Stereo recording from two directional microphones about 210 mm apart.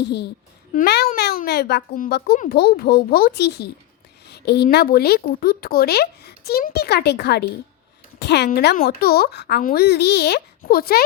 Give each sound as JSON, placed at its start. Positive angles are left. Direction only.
{"t": 0.7, "sound": "speech", "side_deg": 45}